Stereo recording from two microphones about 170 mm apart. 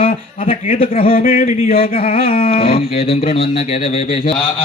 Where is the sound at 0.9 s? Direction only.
35° left (ahead or behind).